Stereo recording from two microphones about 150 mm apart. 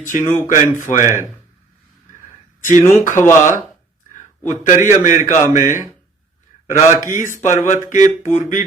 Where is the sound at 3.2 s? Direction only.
15° left (ahead or behind).